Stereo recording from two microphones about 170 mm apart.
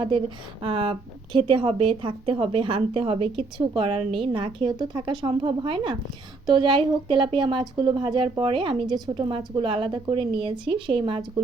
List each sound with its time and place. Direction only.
0.6 s a woman's voice: 30° right (ahead or behind)